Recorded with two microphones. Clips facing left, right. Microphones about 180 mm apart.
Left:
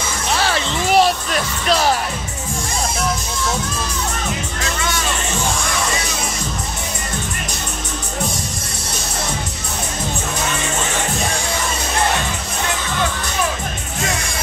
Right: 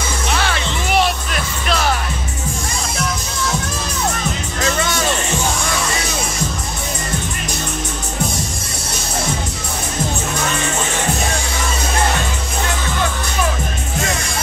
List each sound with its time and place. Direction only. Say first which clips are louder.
0.4 s music: left 1 dB; 35° left (ahead or behind)